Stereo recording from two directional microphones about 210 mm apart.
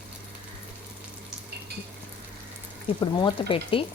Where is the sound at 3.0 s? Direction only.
25° left (ahead or behind).